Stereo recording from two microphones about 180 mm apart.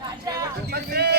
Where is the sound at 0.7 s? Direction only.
65° right (ahead or behind).